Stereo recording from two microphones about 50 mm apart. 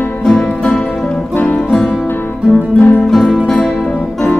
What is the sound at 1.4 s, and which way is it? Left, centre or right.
Music, left.